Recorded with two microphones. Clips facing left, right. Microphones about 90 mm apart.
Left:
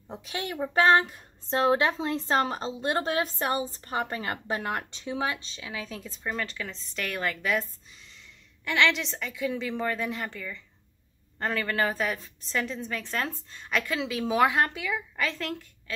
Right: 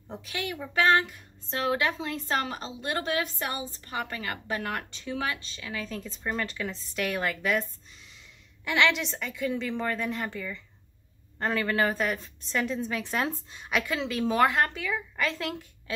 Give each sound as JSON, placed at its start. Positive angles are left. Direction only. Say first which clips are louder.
{"t": 0.3, "sound": "a woman's voice", "louder": "left 3 dB", "side_deg": 35}
{"t": 8.6, "sound": "a woman's voice", "louder": "even", "side_deg": -5}